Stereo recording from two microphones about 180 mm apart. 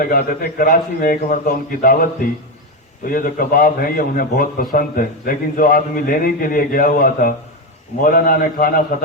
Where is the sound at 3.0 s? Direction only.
50° left (ahead or behind).